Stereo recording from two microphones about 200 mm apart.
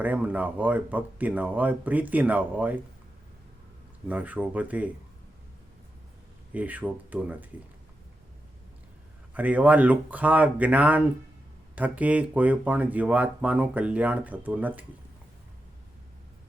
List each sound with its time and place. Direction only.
0.0 s speech: 10° right (ahead or behind)
4.1 s speech: 10° right (ahead or behind)
6.5 s speech: 10° right (ahead or behind)
9.3 s speech: 5° right (ahead or behind)